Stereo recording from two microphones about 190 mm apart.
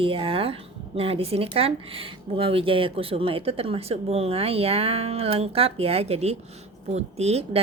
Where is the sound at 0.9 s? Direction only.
30° right (ahead or behind).